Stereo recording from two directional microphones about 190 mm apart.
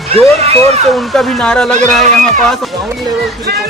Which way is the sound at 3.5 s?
55° right (ahead or behind).